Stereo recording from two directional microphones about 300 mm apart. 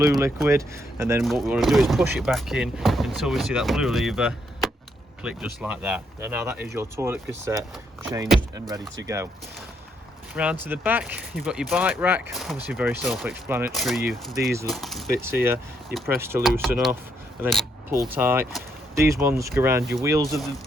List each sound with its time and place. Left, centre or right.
0.0 s speech: centre
9.0 s speech: centre
10.3 s speech: centre
17.4 s a sound: centre
18.1 s speech: centre